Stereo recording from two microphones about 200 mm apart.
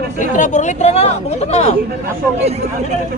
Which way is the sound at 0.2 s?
40° left (ahead or behind).